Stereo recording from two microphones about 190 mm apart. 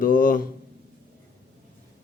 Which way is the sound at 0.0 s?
45° left (ahead or behind).